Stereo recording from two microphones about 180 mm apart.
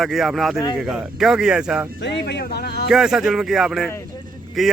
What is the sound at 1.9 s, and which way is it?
Speech, 70° left (ahead or behind).